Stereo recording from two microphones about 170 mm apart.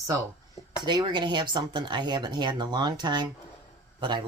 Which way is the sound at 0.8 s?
25° right (ahead or behind).